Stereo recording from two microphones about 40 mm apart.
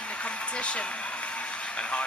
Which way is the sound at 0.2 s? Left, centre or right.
Left.